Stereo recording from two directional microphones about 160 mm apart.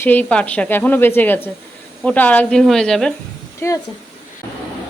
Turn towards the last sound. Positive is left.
turn(degrees=20)  # may be behind; listen again after turning